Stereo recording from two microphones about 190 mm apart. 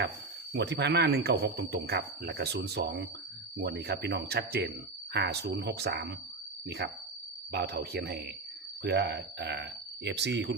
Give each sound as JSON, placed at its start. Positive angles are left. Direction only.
{"t": 0.5, "sound": "speech", "side_deg": -60}